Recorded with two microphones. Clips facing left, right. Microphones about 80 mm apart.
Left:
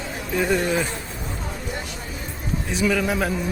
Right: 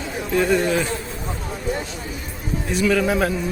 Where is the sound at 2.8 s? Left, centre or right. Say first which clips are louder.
Right 3 dB; centre.